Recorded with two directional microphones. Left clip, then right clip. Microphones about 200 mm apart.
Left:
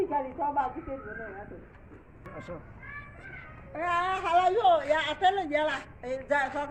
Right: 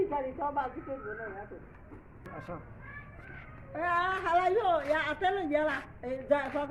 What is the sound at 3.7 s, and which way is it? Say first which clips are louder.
A woman's voice: left 1 dB; 45° right (ahead or behind).